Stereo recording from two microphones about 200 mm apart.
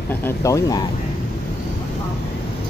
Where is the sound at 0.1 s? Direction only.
10° left (ahead or behind).